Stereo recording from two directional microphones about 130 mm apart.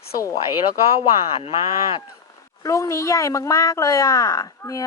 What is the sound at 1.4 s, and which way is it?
Speech, 50° left (ahead or behind).